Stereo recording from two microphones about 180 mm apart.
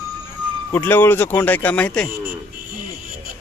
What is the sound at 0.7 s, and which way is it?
Speech, 10° left (ahead or behind).